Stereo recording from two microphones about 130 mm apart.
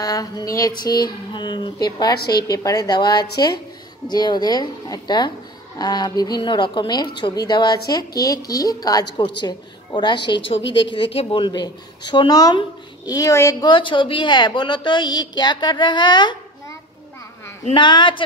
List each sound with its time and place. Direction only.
0.0 s a woman's voice: 30° left (ahead or behind)
13.7 s a woman's voice: 40° left (ahead or behind)
17.7 s a woman's voice: 40° left (ahead or behind)